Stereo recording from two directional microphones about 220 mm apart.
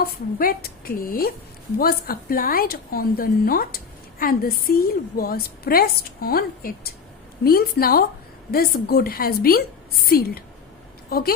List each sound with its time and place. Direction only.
0.0 s a woman's voice: 40° left (ahead or behind)